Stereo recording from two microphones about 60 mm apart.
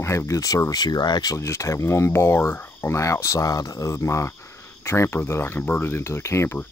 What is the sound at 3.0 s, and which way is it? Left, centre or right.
Speech, left.